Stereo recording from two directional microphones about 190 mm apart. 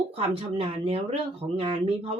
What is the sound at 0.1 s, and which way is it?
Speech, 30° right (ahead or behind).